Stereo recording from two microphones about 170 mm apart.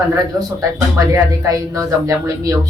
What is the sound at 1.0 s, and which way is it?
Speech, 20° right (ahead or behind).